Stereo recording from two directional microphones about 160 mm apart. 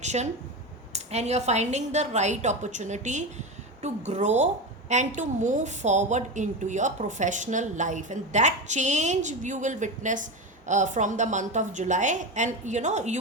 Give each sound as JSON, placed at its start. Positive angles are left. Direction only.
{"t": 0.0, "sound": "a woman's voice", "side_deg": -45}